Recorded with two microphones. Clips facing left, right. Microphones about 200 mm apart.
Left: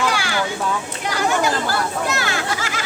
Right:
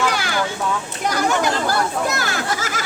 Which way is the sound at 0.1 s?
45° right (ahead or behind).